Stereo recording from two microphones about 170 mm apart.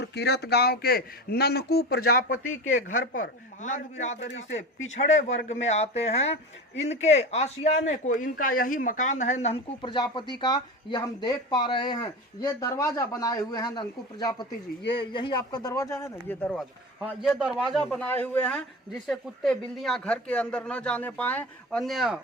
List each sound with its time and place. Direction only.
0.0 s a man's voice: 75° left (ahead or behind); by 4.2 s 45° left (ahead or behind)
4.2 s speech: 90° left
4.5 s speech: 45° left (ahead or behind)
9.9 s a man's voice: 25° left (ahead or behind); by 16.6 s 10° left (ahead or behind)
16.6 s speech: centre (ahead or behind)